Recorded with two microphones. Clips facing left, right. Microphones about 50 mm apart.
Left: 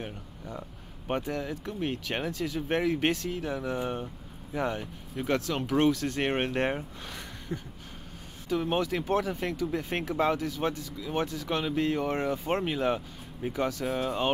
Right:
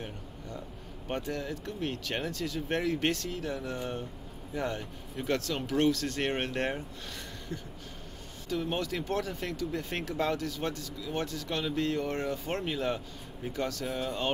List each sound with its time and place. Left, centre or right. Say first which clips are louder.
1.0 s speech: left 3 dB; centre